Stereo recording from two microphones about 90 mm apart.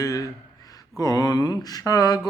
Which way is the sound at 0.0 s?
40° left (ahead or behind).